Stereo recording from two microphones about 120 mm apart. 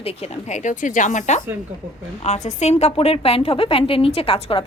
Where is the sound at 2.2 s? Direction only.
70° left (ahead or behind).